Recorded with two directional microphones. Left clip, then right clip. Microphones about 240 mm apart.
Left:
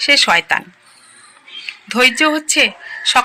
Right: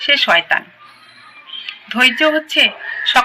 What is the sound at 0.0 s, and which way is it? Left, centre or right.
Speech, left.